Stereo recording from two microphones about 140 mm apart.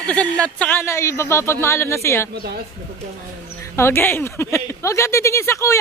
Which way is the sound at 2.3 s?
90° right.